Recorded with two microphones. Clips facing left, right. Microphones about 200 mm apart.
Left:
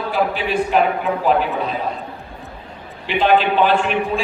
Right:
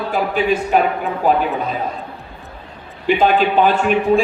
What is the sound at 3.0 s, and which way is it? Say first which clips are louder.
A man's voice: right 2 dB; 45° right (ahead or behind).